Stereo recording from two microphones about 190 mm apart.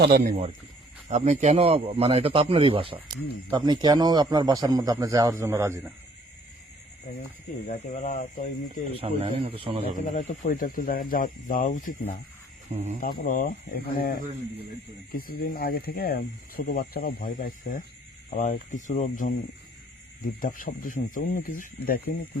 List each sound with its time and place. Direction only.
0.0 s speech: 50° right (ahead or behind)
1.1 s a man's voice: 35° right (ahead or behind); by 5.9 s 15° right (ahead or behind)
7.7 s speech: 40° left (ahead or behind)
9.0 s a man's voice: 30° right (ahead or behind)
10.1 s speech: 35° left (ahead or behind)
12.7 s speech: 35° right (ahead or behind)
13.0 s speech: 45° left (ahead or behind)